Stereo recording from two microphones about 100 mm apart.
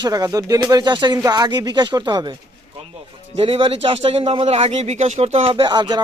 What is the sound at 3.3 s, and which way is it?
Speech, 75° right (ahead or behind).